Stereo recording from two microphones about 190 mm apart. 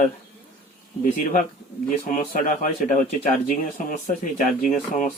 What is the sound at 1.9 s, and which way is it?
Speech, 45° left (ahead or behind).